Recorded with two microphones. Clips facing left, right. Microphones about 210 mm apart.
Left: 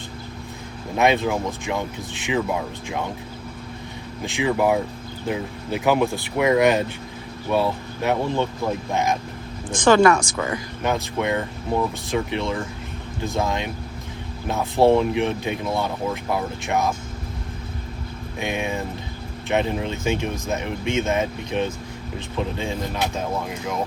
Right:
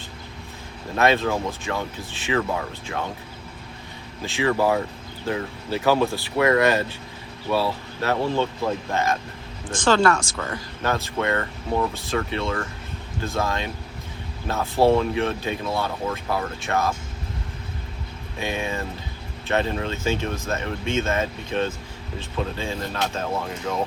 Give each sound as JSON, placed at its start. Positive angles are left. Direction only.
{"t": 0.9, "sound": "speech", "side_deg": 15}
{"t": 4.3, "sound": "speech", "side_deg": 15}
{"t": 18.3, "sound": "speech", "side_deg": 15}